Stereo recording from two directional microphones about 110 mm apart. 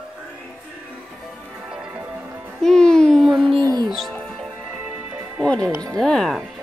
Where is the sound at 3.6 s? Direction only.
35° right (ahead or behind).